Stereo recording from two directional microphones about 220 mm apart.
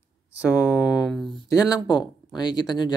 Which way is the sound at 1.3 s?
15° left (ahead or behind).